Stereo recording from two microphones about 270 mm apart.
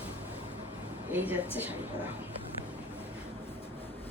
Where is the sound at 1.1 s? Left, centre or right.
Centre.